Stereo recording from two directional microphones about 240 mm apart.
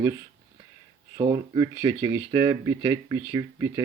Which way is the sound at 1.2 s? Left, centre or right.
Centre.